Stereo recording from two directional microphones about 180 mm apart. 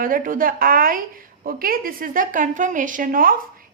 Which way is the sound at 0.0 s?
50° right (ahead or behind).